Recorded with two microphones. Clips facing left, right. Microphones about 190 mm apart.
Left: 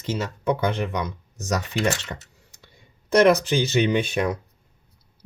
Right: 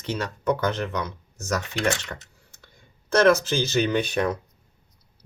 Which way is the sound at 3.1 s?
15° left (ahead or behind).